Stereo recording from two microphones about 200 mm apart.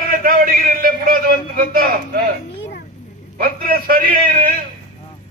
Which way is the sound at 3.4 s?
45° right (ahead or behind).